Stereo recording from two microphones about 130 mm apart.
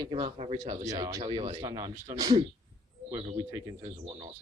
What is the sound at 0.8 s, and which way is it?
Speech, 25° right (ahead or behind).